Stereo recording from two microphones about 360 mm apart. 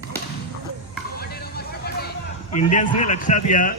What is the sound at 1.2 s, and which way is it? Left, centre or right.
Music, left.